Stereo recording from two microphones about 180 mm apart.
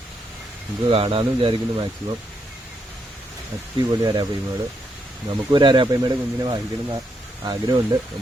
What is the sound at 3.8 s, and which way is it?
Speech, 25° right (ahead or behind).